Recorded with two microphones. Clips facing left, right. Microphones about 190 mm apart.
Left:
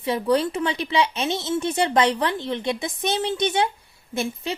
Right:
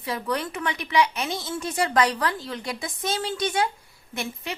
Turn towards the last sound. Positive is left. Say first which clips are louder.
# left 5 dB
turn(degrees=25)  # may be behind; listen again after turning